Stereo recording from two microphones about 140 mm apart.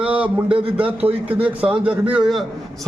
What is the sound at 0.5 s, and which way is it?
Speech, 40° right (ahead or behind).